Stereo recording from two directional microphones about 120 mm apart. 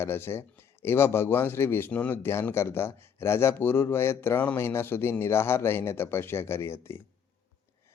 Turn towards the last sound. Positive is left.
turn(degrees=20)  # may be behind; listen again after turning